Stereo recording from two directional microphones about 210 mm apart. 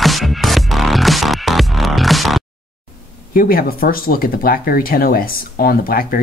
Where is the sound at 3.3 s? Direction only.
45° left (ahead or behind).